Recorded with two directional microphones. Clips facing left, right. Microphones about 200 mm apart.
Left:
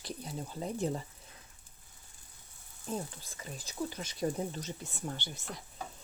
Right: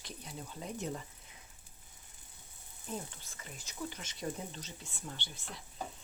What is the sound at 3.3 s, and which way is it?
Speech, 35° left (ahead or behind).